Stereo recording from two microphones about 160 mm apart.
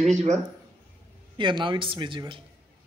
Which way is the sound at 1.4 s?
30° right (ahead or behind).